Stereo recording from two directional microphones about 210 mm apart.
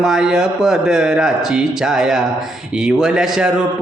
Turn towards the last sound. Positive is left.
turn(degrees=0)  # may be behind; listen again after turning